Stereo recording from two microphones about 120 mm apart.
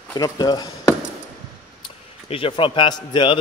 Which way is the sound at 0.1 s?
35° left (ahead or behind).